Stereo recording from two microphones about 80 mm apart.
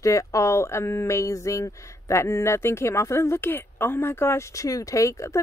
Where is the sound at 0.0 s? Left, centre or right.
Left.